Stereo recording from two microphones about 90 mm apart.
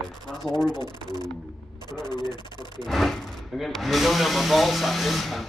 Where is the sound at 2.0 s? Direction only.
50° left (ahead or behind).